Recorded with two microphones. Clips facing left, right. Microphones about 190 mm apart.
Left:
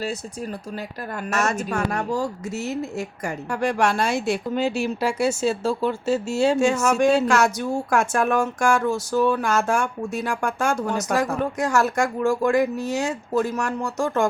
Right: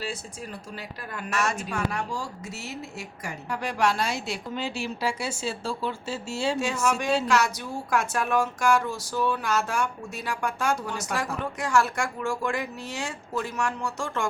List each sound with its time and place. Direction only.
1.1 s a woman's voice: 45° left (ahead or behind)